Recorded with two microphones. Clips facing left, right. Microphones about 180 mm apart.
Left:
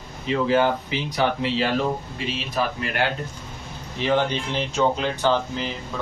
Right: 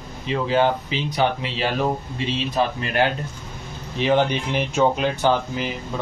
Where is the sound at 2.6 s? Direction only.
25° right (ahead or behind).